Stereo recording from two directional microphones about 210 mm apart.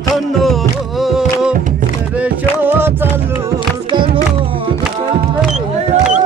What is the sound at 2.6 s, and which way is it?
Music, 10° right (ahead or behind).